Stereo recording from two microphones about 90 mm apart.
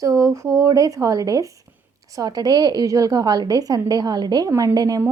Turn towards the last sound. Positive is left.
turn(degrees=-40)  # may be behind; listen again after turning